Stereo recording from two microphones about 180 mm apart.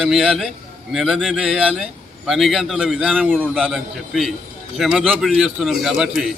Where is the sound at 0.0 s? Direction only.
Centre (ahead or behind).